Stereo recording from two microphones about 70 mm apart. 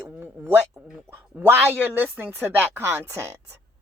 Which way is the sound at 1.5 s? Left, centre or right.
Right.